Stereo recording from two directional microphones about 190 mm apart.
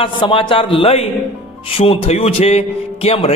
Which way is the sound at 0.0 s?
25° left (ahead or behind).